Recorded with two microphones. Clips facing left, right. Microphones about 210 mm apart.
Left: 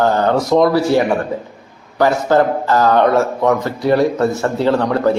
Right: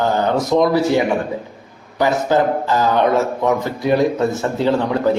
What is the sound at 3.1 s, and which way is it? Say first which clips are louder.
A man's voice: left 2 dB; 20° right (ahead or behind).